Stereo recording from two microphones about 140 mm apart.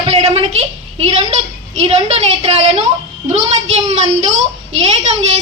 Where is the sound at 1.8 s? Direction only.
45° right (ahead or behind).